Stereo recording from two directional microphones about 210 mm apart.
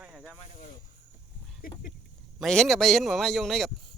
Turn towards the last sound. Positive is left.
turn(degrees=0)  # may be behind; listen again after turning